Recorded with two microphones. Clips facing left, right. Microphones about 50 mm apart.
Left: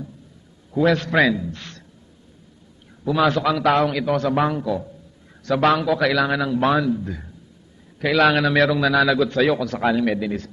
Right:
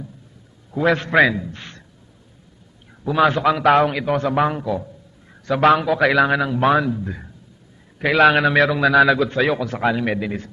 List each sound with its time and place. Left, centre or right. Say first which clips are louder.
0.7 s a man's voice: right 2 dB; right
3.0 s a man's voice: right 2 dB; centre